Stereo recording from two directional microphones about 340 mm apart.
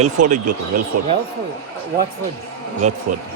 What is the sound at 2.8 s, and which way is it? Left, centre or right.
Speech, centre.